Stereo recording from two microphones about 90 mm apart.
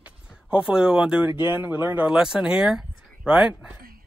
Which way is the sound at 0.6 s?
10° right (ahead or behind).